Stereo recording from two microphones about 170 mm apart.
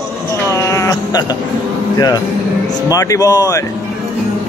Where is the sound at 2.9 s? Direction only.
20° left (ahead or behind).